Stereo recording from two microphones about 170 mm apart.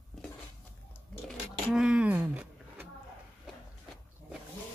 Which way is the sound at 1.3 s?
Centre (ahead or behind).